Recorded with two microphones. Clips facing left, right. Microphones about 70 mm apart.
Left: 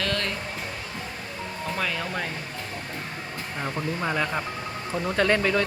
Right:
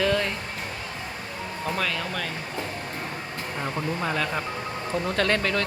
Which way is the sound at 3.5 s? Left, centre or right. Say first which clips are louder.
Even; centre.